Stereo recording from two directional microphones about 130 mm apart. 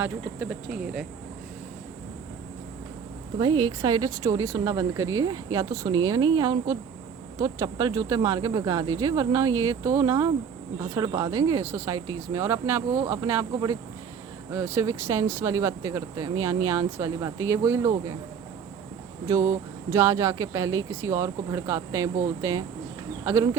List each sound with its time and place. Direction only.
0.0 s speech: 10° right (ahead or behind)
3.3 s speech: 30° right (ahead or behind)
14.5 s speech: 20° right (ahead or behind)
19.3 s speech: 20° right (ahead or behind)